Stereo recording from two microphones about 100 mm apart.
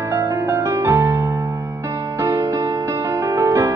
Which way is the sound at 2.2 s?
35° right (ahead or behind).